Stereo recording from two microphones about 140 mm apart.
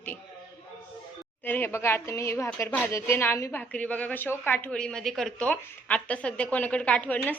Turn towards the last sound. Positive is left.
turn(degrees=10)  # may be behind; listen again after turning